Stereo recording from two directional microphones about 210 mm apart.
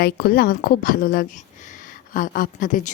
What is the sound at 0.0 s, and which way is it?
Speech, 45° left (ahead or behind).